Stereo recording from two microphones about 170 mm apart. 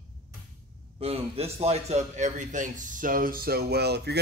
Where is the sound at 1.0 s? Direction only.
35° right (ahead or behind).